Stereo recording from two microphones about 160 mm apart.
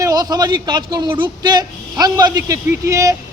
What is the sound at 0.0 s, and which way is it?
A man's voice, 20° right (ahead or behind).